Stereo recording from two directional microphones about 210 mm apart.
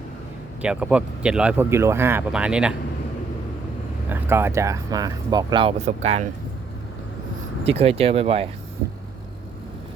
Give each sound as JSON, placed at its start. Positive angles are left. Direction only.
{"t": 0.6, "sound": "speech", "side_deg": -5}
{"t": 4.1, "sound": "speech", "side_deg": -10}
{"t": 7.6, "sound": "speech", "side_deg": -30}